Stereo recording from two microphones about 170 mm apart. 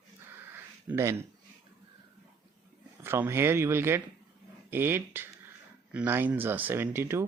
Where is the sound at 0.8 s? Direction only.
15° right (ahead or behind).